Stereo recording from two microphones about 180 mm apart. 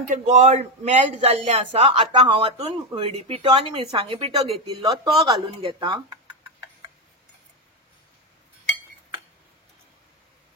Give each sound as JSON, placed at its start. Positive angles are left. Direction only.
{"t": 0.1, "sound": "a man's voice", "side_deg": -40}